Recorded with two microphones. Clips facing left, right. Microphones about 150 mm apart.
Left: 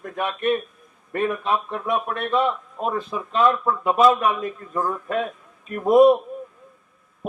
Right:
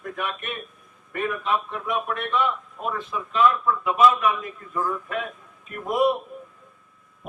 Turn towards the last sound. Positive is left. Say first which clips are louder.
# left 8 dB
turn(degrees=40)  # may be behind; listen again after turning